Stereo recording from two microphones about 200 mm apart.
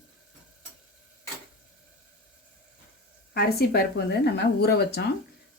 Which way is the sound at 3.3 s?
50° left (ahead or behind).